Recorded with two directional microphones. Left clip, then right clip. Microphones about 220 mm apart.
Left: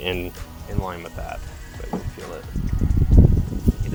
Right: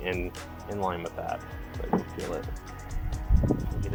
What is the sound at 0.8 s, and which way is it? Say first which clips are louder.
Speech: even; 15° left (ahead or behind).